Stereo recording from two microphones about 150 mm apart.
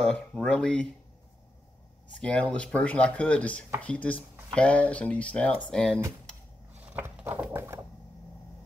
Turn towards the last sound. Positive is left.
turn(degrees=-15)  # may be behind; listen again after turning